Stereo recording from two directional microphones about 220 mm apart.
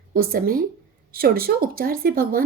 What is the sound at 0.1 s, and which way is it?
A woman's voice, 45° right (ahead or behind).